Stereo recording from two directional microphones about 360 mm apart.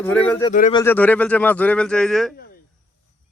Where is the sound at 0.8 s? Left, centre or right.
Centre.